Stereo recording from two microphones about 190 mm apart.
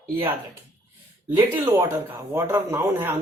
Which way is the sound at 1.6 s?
20° right (ahead or behind).